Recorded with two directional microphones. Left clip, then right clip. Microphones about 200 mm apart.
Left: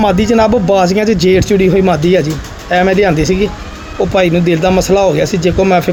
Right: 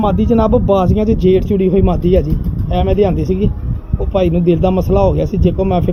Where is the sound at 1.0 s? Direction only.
35° left (ahead or behind).